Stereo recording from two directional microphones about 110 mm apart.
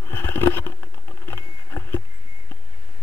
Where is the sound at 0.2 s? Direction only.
20° left (ahead or behind).